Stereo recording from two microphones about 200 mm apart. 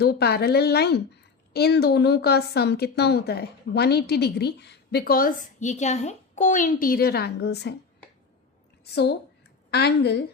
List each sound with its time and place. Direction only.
0.0 s a woman's voice: 55° left (ahead or behind)
8.8 s a woman's voice: 55° left (ahead or behind)